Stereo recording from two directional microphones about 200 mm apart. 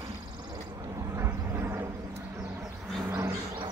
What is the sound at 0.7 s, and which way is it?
Vehicle, 15° right (ahead or behind).